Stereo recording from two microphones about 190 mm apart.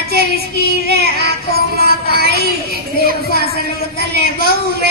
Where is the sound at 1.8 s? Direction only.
55° left (ahead or behind).